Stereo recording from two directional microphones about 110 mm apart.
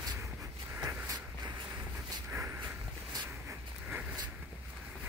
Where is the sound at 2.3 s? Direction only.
20° right (ahead or behind).